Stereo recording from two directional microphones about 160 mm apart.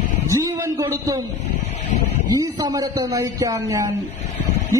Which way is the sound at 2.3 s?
20° right (ahead or behind).